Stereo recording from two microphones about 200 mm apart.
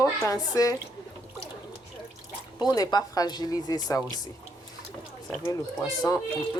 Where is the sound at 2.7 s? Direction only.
20° left (ahead or behind).